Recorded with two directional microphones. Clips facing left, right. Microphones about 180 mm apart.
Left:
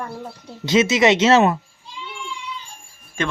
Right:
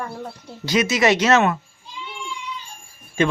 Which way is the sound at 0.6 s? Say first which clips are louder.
Left 3 dB; 25° left (ahead or behind).